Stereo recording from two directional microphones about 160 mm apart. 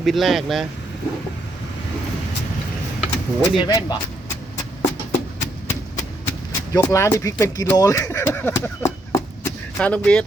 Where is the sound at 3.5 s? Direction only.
30° left (ahead or behind).